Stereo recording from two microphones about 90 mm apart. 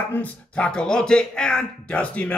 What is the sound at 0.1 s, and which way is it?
A man's voice, 15° left (ahead or behind).